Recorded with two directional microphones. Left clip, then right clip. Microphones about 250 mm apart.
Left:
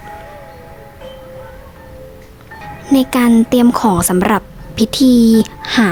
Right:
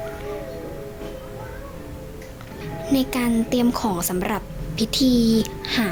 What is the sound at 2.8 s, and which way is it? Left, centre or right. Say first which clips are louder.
Speech: left 10 dB; left.